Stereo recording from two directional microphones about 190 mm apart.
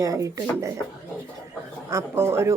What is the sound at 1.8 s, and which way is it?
Speech, 15° right (ahead or behind).